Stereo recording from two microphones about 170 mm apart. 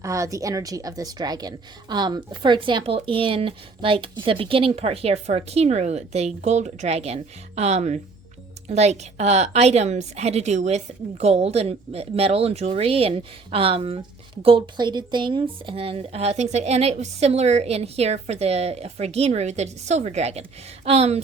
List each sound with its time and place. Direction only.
0.0 s a woman's voice: 20° right (ahead or behind); by 21.2 s 40° right (ahead or behind)